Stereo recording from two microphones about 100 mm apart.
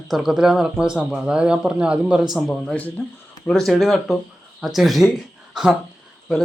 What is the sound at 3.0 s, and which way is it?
Speech, 20° left (ahead or behind).